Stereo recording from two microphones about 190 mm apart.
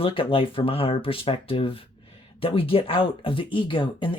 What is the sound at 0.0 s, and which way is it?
Speech, 30° left (ahead or behind).